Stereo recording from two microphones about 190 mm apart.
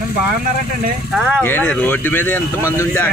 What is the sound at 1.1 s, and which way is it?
Speech, 5° right (ahead or behind).